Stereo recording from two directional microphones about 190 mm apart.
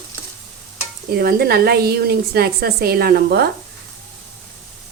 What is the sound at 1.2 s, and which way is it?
A woman's voice, 55° right (ahead or behind).